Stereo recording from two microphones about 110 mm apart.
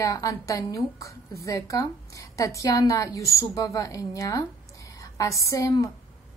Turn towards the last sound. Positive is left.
turn(degrees=30)  # may be behind; listen again after turning